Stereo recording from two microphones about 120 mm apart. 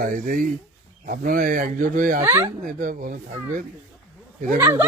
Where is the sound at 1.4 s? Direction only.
90° right.